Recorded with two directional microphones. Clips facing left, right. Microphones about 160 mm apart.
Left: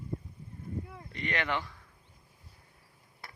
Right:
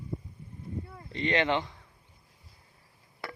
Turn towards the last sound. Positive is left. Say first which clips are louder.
# right 10 dB
turn(degrees=-80)